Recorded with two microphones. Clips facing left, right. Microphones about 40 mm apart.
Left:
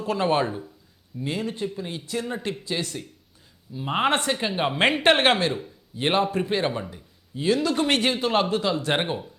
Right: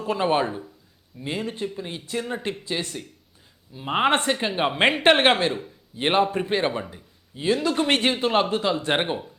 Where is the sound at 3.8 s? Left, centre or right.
Centre.